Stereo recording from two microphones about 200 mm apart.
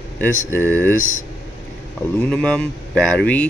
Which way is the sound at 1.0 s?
40° left (ahead or behind).